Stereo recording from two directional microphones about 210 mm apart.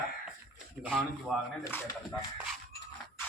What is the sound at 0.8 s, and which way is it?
Speech, centre (ahead or behind).